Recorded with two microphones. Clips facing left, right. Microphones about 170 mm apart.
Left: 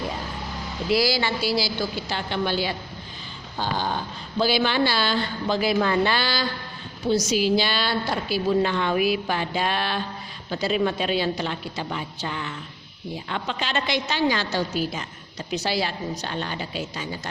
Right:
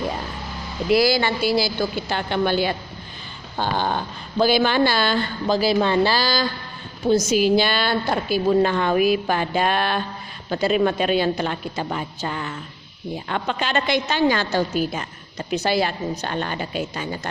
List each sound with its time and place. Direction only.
0.9 s a woman's voice: 55° right (ahead or behind)
5.5 s speech: 30° right (ahead or behind)
7.0 s a woman's voice: 50° right (ahead or behind)